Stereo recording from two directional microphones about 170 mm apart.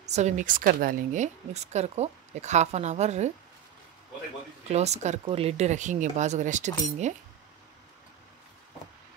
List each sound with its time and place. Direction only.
0.0 s a woman's voice: 40° right (ahead or behind)
4.6 s a woman's voice: 40° right (ahead or behind)